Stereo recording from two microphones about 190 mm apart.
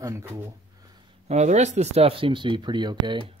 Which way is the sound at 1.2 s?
35° right (ahead or behind).